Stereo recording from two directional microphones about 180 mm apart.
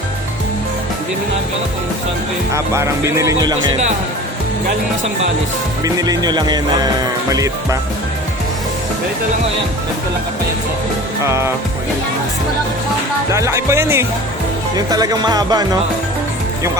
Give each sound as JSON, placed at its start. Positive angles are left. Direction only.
{"t": 2.5, "sound": "speech", "side_deg": -15}
{"t": 5.8, "sound": "music", "side_deg": -20}
{"t": 11.2, "sound": "speech", "side_deg": -15}
{"t": 13.3, "sound": "speech", "side_deg": -15}
{"t": 14.8, "sound": "music", "side_deg": -20}